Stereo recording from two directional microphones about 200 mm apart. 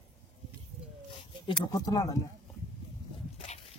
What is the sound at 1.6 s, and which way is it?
Speech, 20° left (ahead or behind).